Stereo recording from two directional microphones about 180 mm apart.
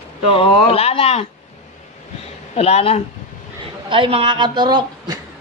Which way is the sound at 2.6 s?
35° left (ahead or behind).